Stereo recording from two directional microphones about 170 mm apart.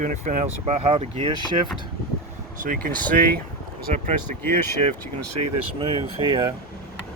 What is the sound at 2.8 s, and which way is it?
Speech, 55° right (ahead or behind).